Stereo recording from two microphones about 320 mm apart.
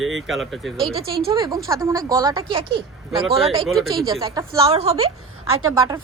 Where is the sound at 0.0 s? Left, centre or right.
Centre.